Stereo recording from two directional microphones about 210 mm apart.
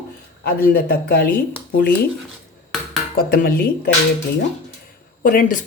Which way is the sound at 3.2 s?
45° left (ahead or behind).